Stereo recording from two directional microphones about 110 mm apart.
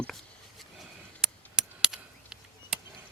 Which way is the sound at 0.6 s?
5° right (ahead or behind).